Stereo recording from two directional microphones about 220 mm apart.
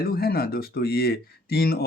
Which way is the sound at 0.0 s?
45° left (ahead or behind).